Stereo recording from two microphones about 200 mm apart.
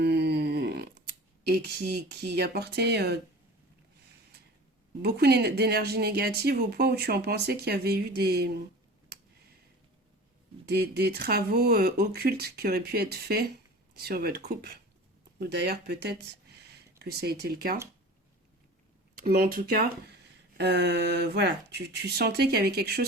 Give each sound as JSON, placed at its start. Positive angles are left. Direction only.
{"t": 0.0, "sound": "a sound", "side_deg": -55}
{"t": 1.5, "sound": "speech", "side_deg": -55}
{"t": 5.0, "sound": "speech", "side_deg": -55}
{"t": 10.7, "sound": "speech", "side_deg": -50}
{"t": 19.1, "sound": "speech", "side_deg": -45}